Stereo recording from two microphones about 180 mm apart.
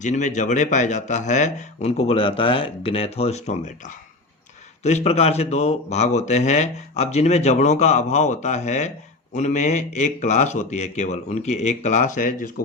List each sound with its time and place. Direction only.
0.0 s speech: 45° left (ahead or behind)